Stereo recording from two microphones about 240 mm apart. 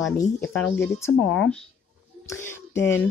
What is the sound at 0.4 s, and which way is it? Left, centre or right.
Speech, centre.